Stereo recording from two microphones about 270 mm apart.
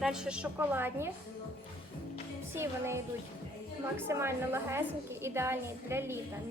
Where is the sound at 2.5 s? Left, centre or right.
Centre.